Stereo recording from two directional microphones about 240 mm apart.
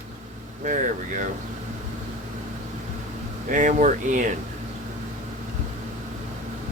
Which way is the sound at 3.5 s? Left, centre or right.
Right.